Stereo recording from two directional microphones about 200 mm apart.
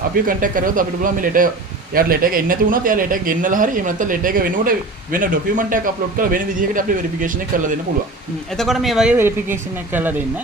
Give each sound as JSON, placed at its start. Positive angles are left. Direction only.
{"t": 0.3, "sound": "speech", "side_deg": -40}
{"t": 8.5, "sound": "speech", "side_deg": 0}